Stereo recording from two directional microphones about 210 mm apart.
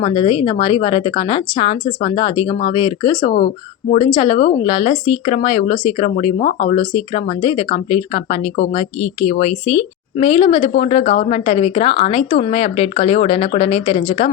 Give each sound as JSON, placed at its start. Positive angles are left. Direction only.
{"t": 0.0, "sound": "a woman's voice", "side_deg": 25}